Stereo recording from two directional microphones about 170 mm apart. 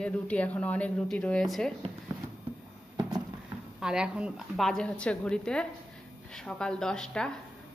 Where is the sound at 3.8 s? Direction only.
5° right (ahead or behind).